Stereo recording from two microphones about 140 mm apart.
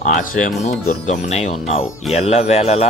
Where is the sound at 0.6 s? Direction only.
55° left (ahead or behind).